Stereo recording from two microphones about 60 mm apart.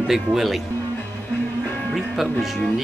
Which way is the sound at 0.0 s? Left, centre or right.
Centre.